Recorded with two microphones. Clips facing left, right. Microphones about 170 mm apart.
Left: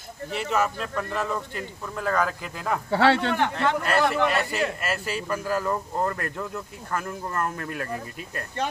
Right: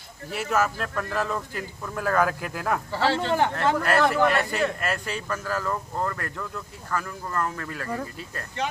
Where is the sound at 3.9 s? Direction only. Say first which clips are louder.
Right 2 dB; centre (ahead or behind).